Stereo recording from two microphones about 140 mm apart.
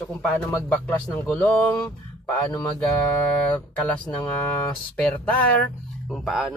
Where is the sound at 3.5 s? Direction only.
10° left (ahead or behind).